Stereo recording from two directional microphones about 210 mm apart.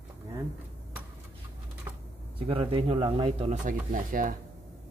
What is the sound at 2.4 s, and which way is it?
Speech, 25° right (ahead or behind).